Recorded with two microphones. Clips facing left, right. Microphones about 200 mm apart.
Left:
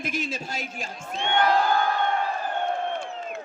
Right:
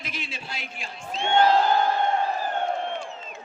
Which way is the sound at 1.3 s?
25° right (ahead or behind).